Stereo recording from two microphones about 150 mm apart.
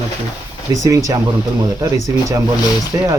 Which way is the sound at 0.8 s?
20° right (ahead or behind).